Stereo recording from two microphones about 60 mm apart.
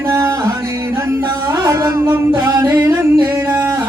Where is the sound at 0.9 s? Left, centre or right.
Right.